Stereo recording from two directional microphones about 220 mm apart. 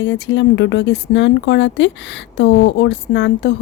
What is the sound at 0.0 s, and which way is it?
A woman's voice, 55° left (ahead or behind).